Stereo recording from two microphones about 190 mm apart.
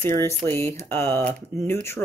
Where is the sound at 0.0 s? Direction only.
15° left (ahead or behind).